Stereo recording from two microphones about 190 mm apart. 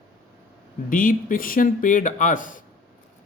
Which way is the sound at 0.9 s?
45° left (ahead or behind).